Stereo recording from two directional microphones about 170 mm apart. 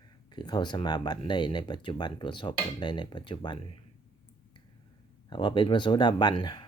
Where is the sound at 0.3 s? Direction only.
25° left (ahead or behind).